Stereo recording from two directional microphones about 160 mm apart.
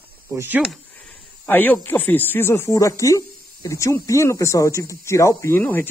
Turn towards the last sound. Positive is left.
turn(degrees=10)  # may be behind; listen again after turning